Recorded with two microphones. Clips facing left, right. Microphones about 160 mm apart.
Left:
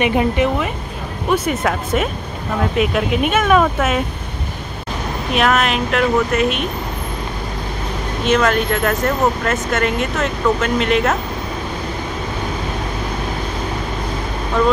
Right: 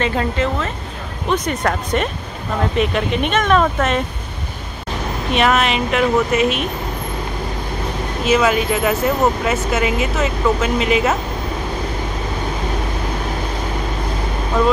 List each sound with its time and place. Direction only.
0.0 s speech: 15° left (ahead or behind)
1.3 s speech: 5° left (ahead or behind)
5.3 s speech: centre (ahead or behind)
8.3 s speech: 5° right (ahead or behind)